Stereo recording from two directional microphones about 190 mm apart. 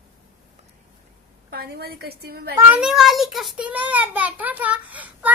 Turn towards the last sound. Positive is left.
turn(degrees=-10)  # may be behind; listen again after turning